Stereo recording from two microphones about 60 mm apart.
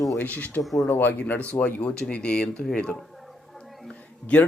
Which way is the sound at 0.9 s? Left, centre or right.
Left.